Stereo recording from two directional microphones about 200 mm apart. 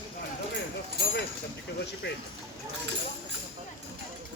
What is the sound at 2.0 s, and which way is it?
Speech, 60° left (ahead or behind).